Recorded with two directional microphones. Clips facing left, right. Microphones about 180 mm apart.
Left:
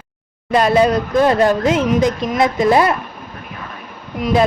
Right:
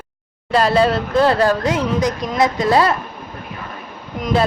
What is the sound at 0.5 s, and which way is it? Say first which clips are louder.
Speech: left 2 dB; 20° left (ahead or behind).